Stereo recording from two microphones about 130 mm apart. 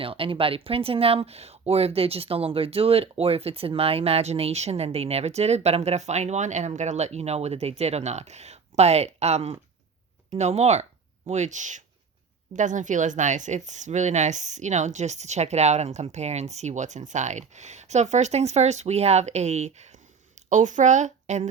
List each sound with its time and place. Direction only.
0.0 s speech: 45° right (ahead or behind); by 21.4 s 65° right (ahead or behind)